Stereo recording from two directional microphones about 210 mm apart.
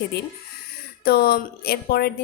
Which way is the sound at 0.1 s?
50° left (ahead or behind).